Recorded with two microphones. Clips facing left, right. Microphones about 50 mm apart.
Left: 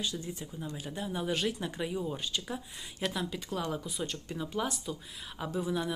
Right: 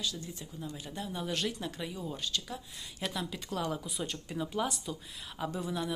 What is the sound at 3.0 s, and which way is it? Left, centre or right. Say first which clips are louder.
Speech: left 3 dB; centre.